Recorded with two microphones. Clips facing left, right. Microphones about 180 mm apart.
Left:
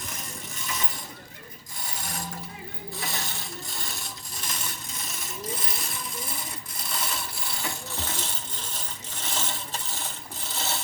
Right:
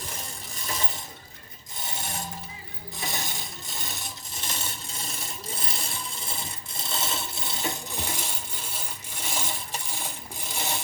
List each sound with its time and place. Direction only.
1.8 s ratchet: 25° right (ahead or behind)
3.0 s coin: 20° right (ahead or behind)
4.4 s a sound: 25° right (ahead or behind)